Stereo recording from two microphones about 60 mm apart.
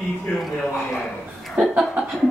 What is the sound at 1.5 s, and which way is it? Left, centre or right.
Speech, centre.